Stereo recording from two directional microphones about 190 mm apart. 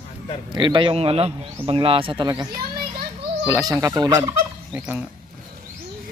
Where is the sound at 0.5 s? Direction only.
25° right (ahead or behind).